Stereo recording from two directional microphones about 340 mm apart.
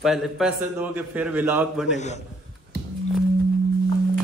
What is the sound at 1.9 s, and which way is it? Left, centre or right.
Speech, centre.